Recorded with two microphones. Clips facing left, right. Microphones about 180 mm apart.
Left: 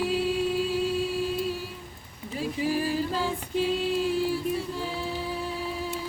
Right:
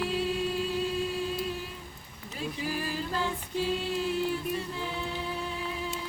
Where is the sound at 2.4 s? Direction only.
5° left (ahead or behind).